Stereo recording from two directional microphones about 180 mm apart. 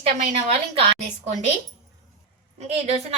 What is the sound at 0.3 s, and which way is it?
Speech, 35° right (ahead or behind).